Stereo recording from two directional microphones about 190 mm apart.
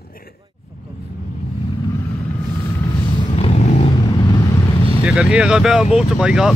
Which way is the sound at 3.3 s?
35° left (ahead or behind).